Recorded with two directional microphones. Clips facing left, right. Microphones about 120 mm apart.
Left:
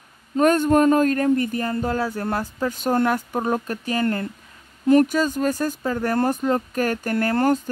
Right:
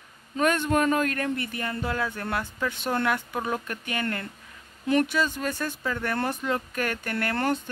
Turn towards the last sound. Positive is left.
turn(degrees=40)  # may be behind; listen again after turning